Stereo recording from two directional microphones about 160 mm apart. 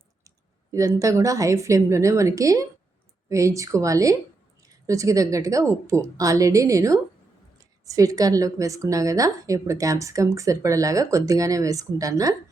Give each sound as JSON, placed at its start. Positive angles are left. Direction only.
{"t": 0.3, "sound": "a woman's voice", "side_deg": -20}